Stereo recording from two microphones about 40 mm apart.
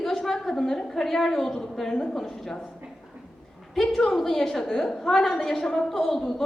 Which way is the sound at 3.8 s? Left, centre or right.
Centre.